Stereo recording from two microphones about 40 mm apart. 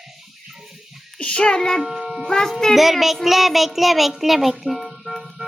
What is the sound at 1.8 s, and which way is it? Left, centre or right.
Speech, centre.